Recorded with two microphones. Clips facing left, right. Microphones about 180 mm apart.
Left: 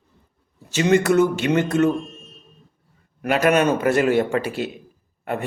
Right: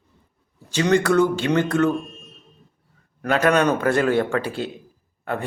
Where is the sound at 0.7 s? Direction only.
5° left (ahead or behind).